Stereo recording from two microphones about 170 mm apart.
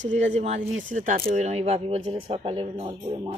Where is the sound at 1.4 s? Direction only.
40° right (ahead or behind).